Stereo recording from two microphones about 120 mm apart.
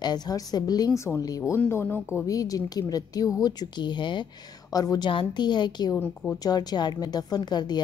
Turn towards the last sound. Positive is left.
turn(degrees=35)  # may be behind; listen again after turning